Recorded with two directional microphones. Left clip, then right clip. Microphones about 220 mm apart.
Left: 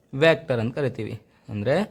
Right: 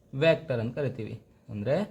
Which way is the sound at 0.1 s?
30° left (ahead or behind).